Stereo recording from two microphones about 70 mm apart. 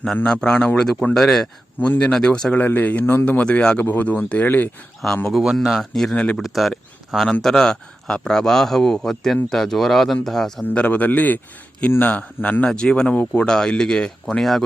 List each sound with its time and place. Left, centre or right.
0.3 s speech: centre
2.6 s speech: left
3.8 s speech: left
5.3 s speech: centre
10.8 s speech: left; by 14.6 s centre